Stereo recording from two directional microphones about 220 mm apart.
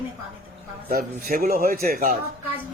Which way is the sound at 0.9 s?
40° right (ahead or behind).